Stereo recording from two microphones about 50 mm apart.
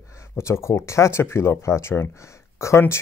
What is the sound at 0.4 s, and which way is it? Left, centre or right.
Speech, left.